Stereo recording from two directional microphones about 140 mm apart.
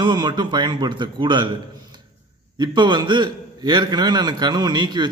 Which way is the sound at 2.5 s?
30° right (ahead or behind).